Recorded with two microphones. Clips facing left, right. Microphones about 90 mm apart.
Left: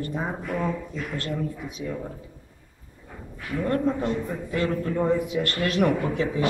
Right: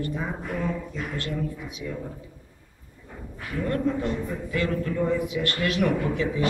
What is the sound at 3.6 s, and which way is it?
A man's voice, 35° left (ahead or behind).